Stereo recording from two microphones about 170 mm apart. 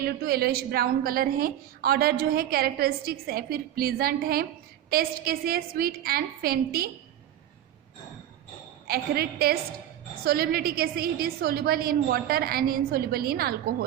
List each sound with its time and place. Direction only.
0.0 s a woman's voice: 65° right (ahead or behind)
8.9 s a woman's voice: 65° right (ahead or behind)